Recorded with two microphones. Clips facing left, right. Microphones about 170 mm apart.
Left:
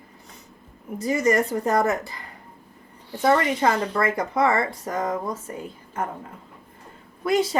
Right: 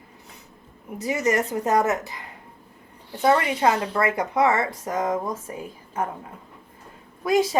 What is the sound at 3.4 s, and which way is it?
Speech, 10° right (ahead or behind).